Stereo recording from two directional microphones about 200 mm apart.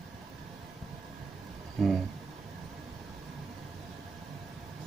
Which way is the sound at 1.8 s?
Centre (ahead or behind).